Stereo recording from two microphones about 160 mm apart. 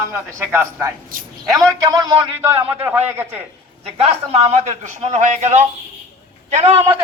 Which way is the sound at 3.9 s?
40° right (ahead or behind).